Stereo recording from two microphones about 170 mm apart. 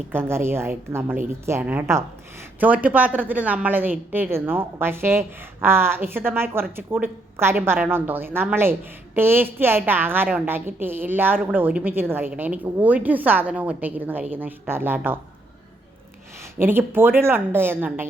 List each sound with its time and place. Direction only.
0.1 s a woman's voice: 15° right (ahead or behind)
16.4 s a woman's voice: 15° right (ahead or behind)